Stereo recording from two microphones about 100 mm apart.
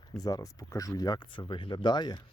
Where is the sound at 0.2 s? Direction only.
35° left (ahead or behind).